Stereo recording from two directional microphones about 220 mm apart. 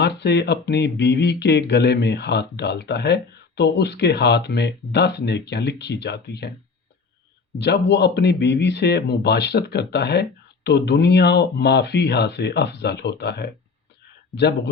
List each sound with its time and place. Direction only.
0.0 s speech: 50° left (ahead or behind)
7.6 s speech: 50° left (ahead or behind)